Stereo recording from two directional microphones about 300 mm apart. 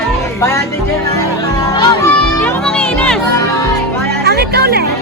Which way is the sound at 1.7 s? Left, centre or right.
Centre.